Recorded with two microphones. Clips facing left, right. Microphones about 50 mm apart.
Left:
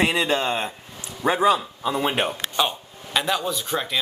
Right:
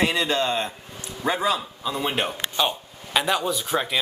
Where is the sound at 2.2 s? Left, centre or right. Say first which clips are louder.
Left 1 dB; centre.